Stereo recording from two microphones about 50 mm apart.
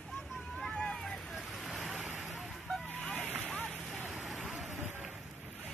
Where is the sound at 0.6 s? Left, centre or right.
Centre.